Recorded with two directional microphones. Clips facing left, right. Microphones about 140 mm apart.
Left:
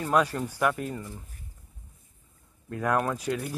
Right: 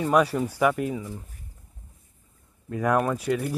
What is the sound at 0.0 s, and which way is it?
Speech, 10° right (ahead or behind).